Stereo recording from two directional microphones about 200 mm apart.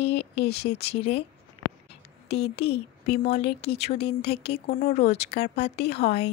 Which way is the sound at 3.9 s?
55° left (ahead or behind).